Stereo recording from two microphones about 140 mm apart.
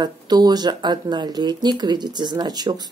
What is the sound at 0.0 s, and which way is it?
Speech, 30° right (ahead or behind).